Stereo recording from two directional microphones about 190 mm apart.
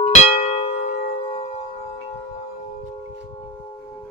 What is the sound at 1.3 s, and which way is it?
Singing bowl, 35° left (ahead or behind).